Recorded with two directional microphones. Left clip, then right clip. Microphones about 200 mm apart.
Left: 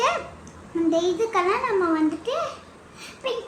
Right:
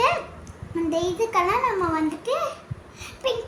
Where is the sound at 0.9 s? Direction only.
35° right (ahead or behind).